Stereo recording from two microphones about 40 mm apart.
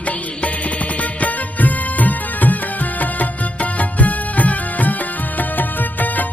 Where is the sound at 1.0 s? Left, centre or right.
Left.